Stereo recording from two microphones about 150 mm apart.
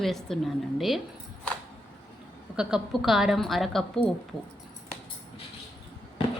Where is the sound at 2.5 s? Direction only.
5° right (ahead or behind).